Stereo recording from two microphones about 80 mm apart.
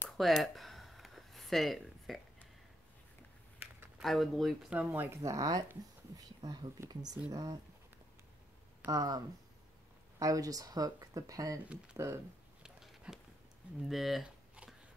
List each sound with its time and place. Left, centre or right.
0.2 s a sound: centre
4.0 s speech: centre
4.6 s speech: right
5.2 s speech: right
8.9 s speech: right
12.0 s speech: right
12.6 s a sound: centre
13.7 s speech: centre